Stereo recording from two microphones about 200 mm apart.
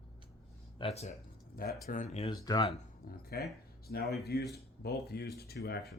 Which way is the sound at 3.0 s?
50° left (ahead or behind).